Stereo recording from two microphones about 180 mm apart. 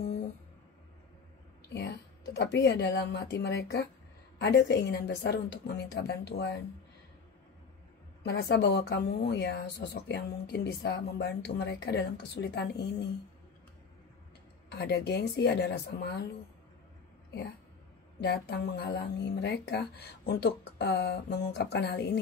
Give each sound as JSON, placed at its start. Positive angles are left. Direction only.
{"t": 1.7, "sound": "speech", "side_deg": 70}
{"t": 8.2, "sound": "speech", "side_deg": 65}
{"t": 14.7, "sound": "speech", "side_deg": 70}
{"t": 18.2, "sound": "speech", "side_deg": 70}